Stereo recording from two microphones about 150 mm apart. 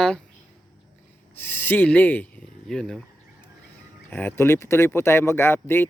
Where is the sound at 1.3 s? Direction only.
15° left (ahead or behind).